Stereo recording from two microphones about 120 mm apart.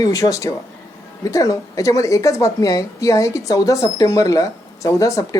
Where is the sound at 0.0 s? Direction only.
30° left (ahead or behind).